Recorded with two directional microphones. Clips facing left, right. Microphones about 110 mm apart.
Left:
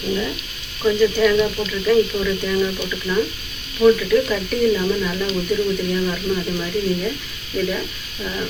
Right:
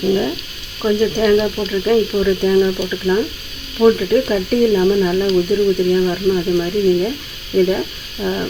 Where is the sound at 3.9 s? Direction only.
30° right (ahead or behind).